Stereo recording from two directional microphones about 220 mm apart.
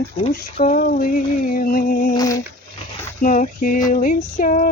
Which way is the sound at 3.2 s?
35° left (ahead or behind).